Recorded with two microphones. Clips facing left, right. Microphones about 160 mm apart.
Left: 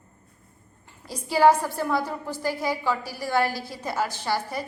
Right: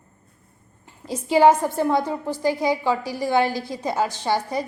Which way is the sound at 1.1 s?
20° right (ahead or behind).